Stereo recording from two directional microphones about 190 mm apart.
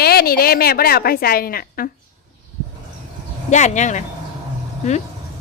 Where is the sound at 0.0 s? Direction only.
55° left (ahead or behind).